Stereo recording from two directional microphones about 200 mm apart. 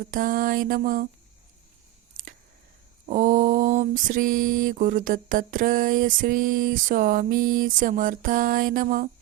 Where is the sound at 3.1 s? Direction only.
40° right (ahead or behind).